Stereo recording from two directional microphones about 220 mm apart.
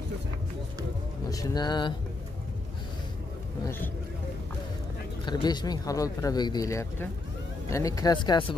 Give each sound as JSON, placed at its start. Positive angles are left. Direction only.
{"t": 1.3, "sound": "speech", "side_deg": 15}
{"t": 3.6, "sound": "speech", "side_deg": 10}
{"t": 5.2, "sound": "speech", "side_deg": 20}